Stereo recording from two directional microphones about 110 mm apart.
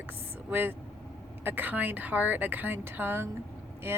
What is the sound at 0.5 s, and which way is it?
A woman's voice, 20° right (ahead or behind).